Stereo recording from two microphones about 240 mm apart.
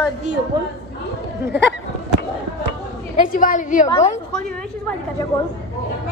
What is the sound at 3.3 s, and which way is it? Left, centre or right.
Speech, left.